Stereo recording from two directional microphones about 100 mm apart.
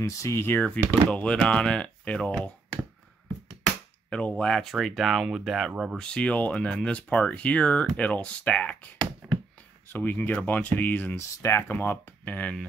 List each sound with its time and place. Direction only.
0.0 s speech: 30° left (ahead or behind); by 2.5 s 10° left (ahead or behind)
4.1 s speech: 10° left (ahead or behind)
5.9 s speech: 10° left (ahead or behind)
11.4 s speech: 25° left (ahead or behind)